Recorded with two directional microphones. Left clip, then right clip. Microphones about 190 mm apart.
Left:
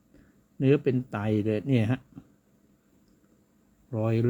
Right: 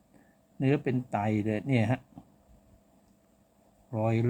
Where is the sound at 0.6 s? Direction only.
20° left (ahead or behind).